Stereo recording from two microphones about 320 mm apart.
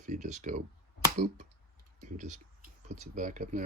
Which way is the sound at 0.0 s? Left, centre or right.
Right.